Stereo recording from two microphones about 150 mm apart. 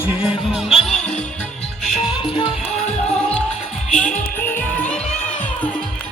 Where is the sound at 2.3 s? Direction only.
40° left (ahead or behind).